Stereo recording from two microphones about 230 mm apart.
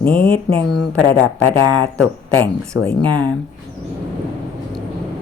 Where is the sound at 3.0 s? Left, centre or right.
Centre.